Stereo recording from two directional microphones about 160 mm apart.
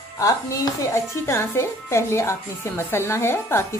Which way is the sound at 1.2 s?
15° left (ahead or behind).